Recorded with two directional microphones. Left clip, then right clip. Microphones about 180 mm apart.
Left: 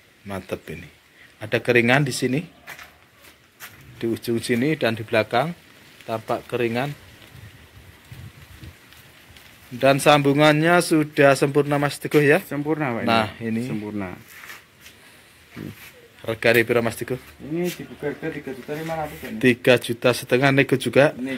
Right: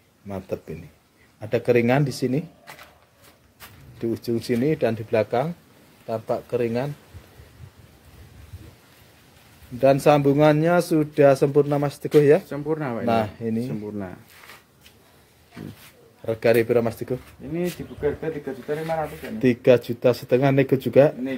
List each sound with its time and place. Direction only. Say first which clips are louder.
0.3 s speech: even; 5° right (ahead or behind)
4.0 s a man's voice: left 1 dB; 5° right (ahead or behind)
9.8 s a man's voice: left 1 dB; 5° right (ahead or behind)
12.4 s speech: left 2 dB; 40° left (ahead or behind)
13.0 s speech: left 1 dB; 10° right (ahead or behind)
13.7 s speech: left 2 dB; 30° left (ahead or behind)
16.3 s a man's voice: left 1 dB; 10° right (ahead or behind)
19.3 s speech: even; 10° right (ahead or behind)